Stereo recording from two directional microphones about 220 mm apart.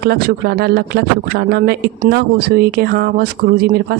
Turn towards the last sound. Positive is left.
turn(degrees=-40)  # may be behind; listen again after turning